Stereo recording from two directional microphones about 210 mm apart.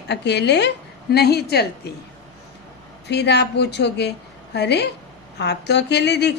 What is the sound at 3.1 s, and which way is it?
A woman's voice, 55° left (ahead or behind).